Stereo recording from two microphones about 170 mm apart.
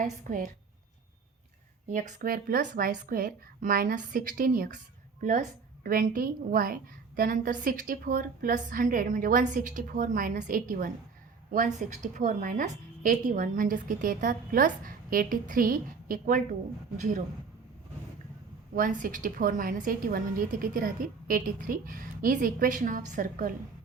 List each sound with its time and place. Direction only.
0.0 s a woman's voice: 50° right (ahead or behind)
1.9 s a woman's voice: 45° right (ahead or behind)
18.8 s a woman's voice: 50° right (ahead or behind)